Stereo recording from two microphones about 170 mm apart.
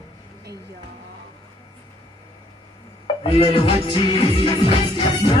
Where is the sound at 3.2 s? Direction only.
30° left (ahead or behind).